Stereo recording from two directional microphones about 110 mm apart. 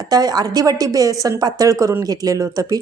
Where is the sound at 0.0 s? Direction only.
35° right (ahead or behind).